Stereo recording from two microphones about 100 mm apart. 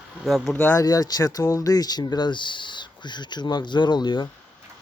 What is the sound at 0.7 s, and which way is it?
Speech, 35° left (ahead or behind).